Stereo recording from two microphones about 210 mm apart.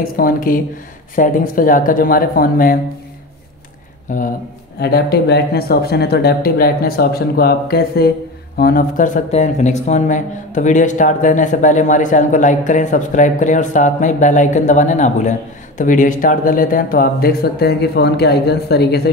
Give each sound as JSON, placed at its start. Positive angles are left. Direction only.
{"t": 0.0, "sound": "speech", "side_deg": 45}
{"t": 4.1, "sound": "speech", "side_deg": 35}
{"t": 4.7, "sound": "speech", "side_deg": 50}